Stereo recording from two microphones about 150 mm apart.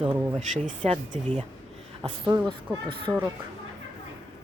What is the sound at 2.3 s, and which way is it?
Speech, 25° right (ahead or behind).